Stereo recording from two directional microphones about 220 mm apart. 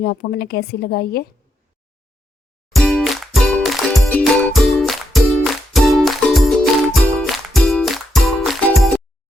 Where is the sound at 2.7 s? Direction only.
Centre (ahead or behind).